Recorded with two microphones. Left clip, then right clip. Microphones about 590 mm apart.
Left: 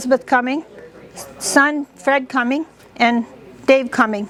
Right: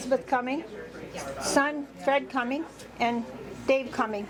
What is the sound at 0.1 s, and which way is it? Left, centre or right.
A woman's voice, left.